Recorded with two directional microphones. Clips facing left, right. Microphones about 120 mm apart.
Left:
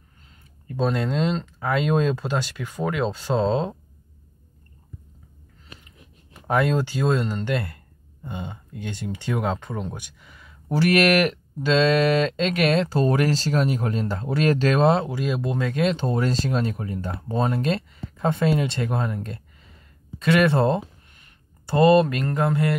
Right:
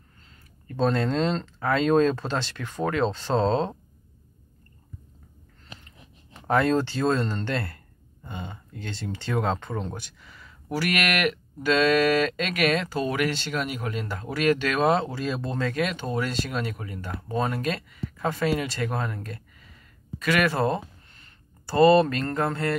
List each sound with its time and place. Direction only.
0.7 s speech: 10° left (ahead or behind)
6.4 s speech: 10° left (ahead or behind)
10.7 s speech: 30° left (ahead or behind)
15.0 s speech: 15° left (ahead or behind)
15.8 s speech: 30° left (ahead or behind); by 22.8 s 15° left (ahead or behind)